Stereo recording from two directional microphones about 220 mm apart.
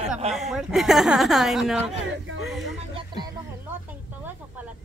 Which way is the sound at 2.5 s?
Centre (ahead or behind).